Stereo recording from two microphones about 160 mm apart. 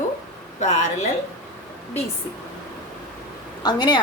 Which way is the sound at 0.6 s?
50° left (ahead or behind).